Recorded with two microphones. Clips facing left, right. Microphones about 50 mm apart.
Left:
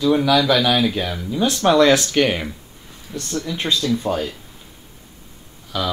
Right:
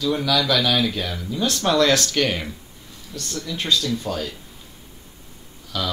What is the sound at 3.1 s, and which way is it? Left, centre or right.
Speech, left.